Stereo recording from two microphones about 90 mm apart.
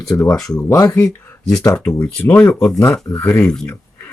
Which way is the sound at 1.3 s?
30° left (ahead or behind).